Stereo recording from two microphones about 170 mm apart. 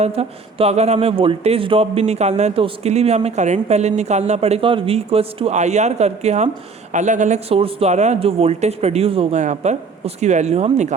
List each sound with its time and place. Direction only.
0.0 s speech: 35° right (ahead or behind)